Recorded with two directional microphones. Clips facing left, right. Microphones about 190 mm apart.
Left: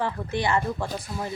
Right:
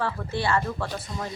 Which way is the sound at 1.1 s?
5° left (ahead or behind).